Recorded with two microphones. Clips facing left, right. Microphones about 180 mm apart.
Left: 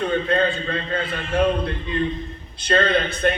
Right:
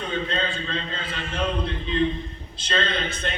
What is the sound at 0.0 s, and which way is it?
A man's voice, 60° left (ahead or behind).